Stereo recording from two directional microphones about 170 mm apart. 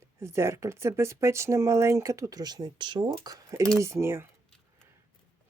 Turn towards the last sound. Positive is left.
turn(degrees=-15)  # may be behind; listen again after turning